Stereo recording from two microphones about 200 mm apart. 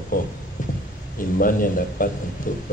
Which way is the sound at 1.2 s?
45° left (ahead or behind).